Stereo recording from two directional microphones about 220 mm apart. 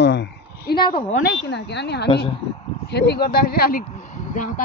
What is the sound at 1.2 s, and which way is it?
Speech, 50° left (ahead or behind).